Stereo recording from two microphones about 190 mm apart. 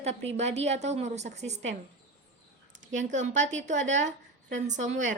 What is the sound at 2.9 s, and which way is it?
Speech, 40° right (ahead or behind).